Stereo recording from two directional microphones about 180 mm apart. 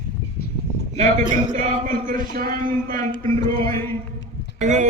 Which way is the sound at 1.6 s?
45° right (ahead or behind).